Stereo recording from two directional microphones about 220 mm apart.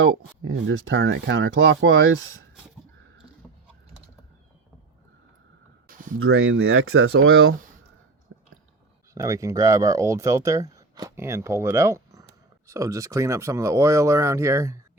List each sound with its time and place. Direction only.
0.0 s speech: 60° right (ahead or behind)
6.1 s speech: 70° right (ahead or behind)
8.3 s chewing: 60° right (ahead or behind)
9.1 s speech: 15° right (ahead or behind)